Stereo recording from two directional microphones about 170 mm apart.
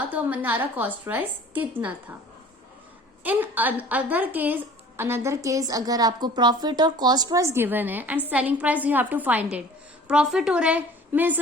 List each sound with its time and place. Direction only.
0.1 s a woman's voice: 10° right (ahead or behind)
3.2 s a woman's voice: 10° right (ahead or behind)